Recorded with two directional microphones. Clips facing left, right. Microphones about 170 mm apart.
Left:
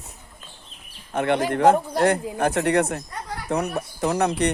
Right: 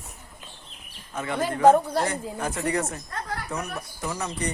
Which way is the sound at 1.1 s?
70° left (ahead or behind).